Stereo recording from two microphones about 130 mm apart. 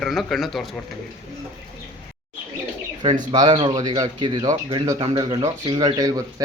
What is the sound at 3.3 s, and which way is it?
Speech, 35° right (ahead or behind).